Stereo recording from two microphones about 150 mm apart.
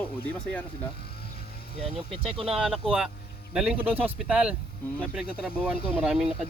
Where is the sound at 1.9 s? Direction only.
40° right (ahead or behind).